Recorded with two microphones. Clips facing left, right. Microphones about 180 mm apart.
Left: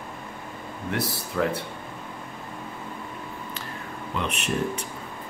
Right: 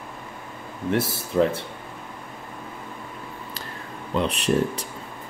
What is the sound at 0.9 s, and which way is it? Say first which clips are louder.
Speech: right 6 dB; 25° right (ahead or behind).